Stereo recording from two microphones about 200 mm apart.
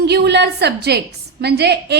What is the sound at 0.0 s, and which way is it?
A woman's voice, 55° right (ahead or behind).